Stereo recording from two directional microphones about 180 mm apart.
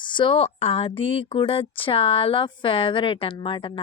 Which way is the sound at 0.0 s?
25° left (ahead or behind).